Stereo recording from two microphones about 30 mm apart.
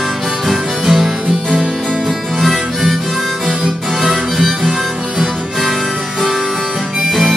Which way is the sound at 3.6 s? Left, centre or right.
Centre.